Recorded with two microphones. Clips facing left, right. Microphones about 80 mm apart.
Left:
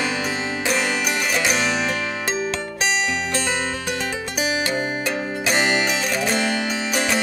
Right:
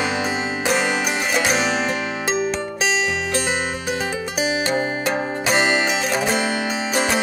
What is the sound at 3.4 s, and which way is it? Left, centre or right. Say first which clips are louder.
Music: right 1 dB; right.